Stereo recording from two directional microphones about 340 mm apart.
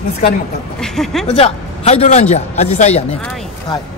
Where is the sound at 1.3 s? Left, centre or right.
Centre.